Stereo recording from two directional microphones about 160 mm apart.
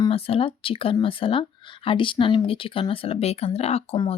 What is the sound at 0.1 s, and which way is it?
Speech, 35° left (ahead or behind).